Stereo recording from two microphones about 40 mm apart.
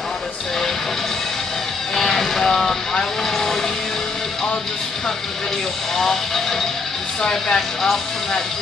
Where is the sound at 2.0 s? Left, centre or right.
Centre.